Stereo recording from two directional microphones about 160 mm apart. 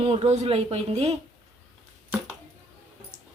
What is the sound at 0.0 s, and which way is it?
Speech, 40° right (ahead or behind).